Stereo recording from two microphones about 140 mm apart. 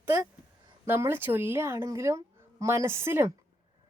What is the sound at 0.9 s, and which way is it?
A woman's voice, 15° right (ahead or behind).